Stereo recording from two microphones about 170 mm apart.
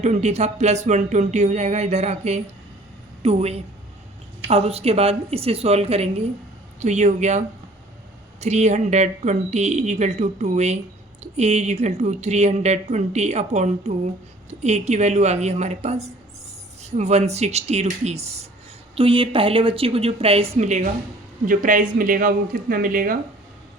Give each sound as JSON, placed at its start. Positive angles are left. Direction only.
{"t": 0.0, "sound": "speech", "side_deg": -40}